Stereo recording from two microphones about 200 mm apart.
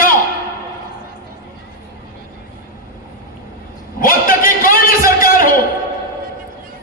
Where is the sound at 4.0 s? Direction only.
45° left (ahead or behind).